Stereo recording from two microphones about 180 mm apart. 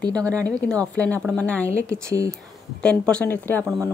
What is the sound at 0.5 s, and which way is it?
Speech, 5° left (ahead or behind).